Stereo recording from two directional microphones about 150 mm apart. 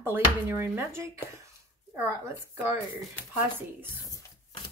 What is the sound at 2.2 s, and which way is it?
Speech, 20° right (ahead or behind).